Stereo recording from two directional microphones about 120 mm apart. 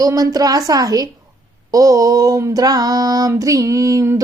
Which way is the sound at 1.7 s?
30° right (ahead or behind).